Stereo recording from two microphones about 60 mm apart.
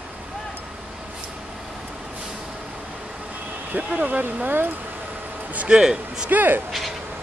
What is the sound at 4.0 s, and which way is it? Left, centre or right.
Speech, right.